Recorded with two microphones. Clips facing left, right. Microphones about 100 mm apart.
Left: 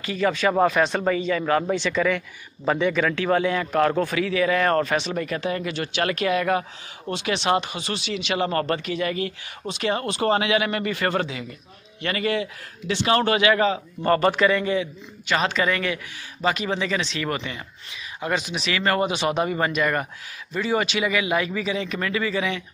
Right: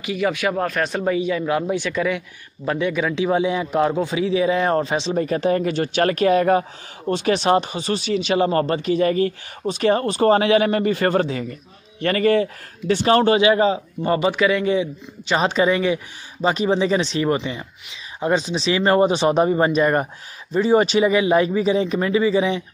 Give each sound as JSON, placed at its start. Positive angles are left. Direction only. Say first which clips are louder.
{"t": 0.0, "sound": "speech", "louder": "right 1 dB", "side_deg": -10}
{"t": 0.6, "sound": "speech", "louder": "left 3 dB", "side_deg": 5}
{"t": 5.1, "sound": "a man's voice", "louder": "right 7 dB", "side_deg": -35}
{"t": 8.5, "sound": "a man's voice", "louder": "right 5 dB", "side_deg": -25}
{"t": 14.0, "sound": "speech", "louder": "even", "side_deg": -10}
{"t": 14.8, "sound": "speech", "louder": "right 4 dB", "side_deg": -25}
{"t": 15.7, "sound": "speech", "louder": "right 6 dB", "side_deg": -20}
{"t": 16.3, "sound": "speech", "louder": "right 5 dB", "side_deg": -30}
{"t": 17.3, "sound": "speech", "louder": "right 7 dB", "side_deg": -20}
{"t": 18.2, "sound": "a man's voice", "louder": "right 6 dB", "side_deg": -30}